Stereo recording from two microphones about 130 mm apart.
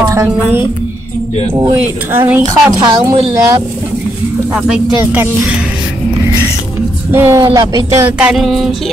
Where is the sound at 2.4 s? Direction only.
30° right (ahead or behind).